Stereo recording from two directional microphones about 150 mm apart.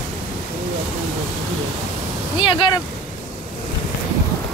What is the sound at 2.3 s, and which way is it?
Speech, 35° left (ahead or behind).